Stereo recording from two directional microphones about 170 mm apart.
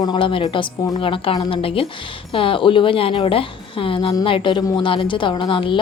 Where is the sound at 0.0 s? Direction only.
30° left (ahead or behind).